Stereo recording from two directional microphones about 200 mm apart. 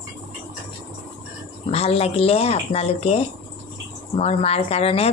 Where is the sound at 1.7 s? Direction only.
30° left (ahead or behind).